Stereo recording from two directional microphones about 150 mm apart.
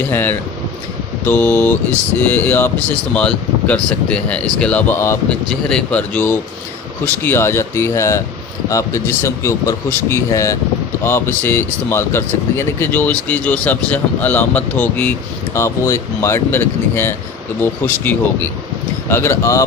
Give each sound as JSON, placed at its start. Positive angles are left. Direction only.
{"t": 0.1, "sound": "speech", "side_deg": 15}
{"t": 5.5, "sound": "speech", "side_deg": 5}